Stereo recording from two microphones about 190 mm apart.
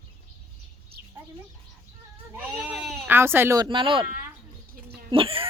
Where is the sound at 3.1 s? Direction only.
10° right (ahead or behind).